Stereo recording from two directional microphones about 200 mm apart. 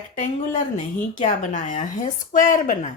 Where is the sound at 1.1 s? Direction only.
40° left (ahead or behind).